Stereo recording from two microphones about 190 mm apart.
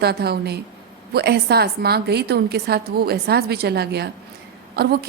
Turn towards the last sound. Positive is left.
turn(degrees=-55)  # may be behind; listen again after turning